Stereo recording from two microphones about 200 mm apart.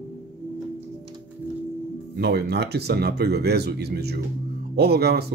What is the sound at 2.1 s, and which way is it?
Speech, 55° right (ahead or behind).